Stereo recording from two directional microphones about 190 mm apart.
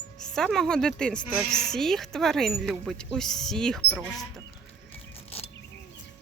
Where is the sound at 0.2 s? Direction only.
5° left (ahead or behind).